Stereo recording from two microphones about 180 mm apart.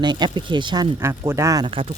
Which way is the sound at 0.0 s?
25° right (ahead or behind).